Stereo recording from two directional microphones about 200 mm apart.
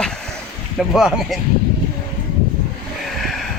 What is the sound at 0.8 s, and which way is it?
Speech, centre (ahead or behind).